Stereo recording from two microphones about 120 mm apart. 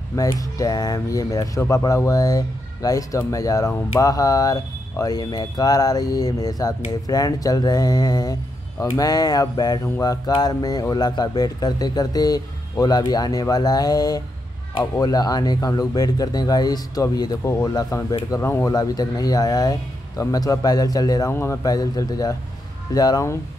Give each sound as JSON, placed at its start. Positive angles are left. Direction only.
{"t": 0.1, "sound": "speech", "side_deg": 30}
{"t": 9.8, "sound": "speech", "side_deg": 20}
{"t": 10.2, "sound": "speech", "side_deg": 35}
{"t": 21.3, "sound": "speech", "side_deg": 20}
{"t": 21.6, "sound": "speech", "side_deg": 30}